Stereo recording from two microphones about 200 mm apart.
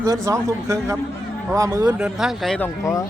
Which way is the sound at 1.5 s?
15° right (ahead or behind).